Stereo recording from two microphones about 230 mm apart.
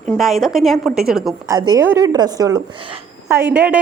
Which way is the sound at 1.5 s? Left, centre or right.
Centre.